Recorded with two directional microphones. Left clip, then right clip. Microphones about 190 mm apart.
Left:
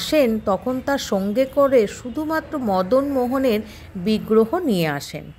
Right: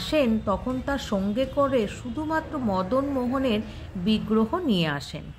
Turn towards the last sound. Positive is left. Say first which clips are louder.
# left 4 dB
turn(degrees=30)  # may be behind; listen again after turning